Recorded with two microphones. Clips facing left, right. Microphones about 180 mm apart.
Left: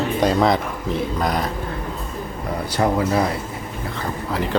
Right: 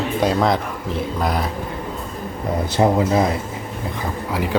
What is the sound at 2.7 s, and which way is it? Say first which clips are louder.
Speech: right 2 dB; 20° right (ahead or behind).